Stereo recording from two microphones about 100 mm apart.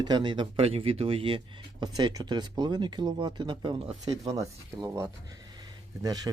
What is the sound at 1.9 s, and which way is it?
Speech, 40° right (ahead or behind).